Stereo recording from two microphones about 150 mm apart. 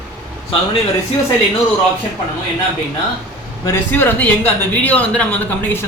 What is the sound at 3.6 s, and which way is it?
Speech, 15° left (ahead or behind).